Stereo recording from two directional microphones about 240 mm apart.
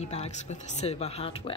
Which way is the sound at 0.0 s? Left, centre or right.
Left.